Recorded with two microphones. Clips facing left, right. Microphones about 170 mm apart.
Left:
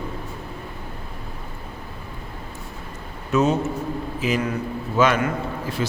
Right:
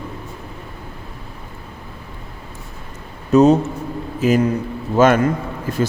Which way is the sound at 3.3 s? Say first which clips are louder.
Right 8 dB; 35° right (ahead or behind).